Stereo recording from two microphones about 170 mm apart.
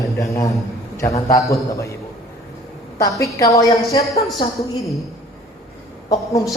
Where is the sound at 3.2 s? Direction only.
20° left (ahead or behind).